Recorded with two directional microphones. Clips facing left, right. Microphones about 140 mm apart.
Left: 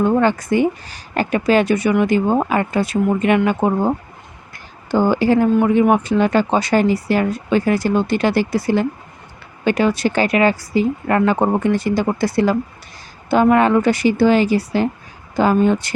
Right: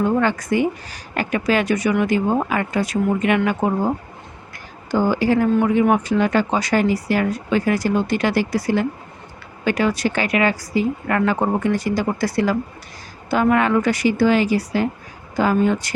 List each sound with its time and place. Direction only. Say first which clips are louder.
0.0 s a woman's voice: left 3 dB; 30° left (ahead or behind)
4.5 s a sound: left 3 dB; 25° left (ahead or behind)
5.6 s a woman's voice: left 2 dB; 25° left (ahead or behind)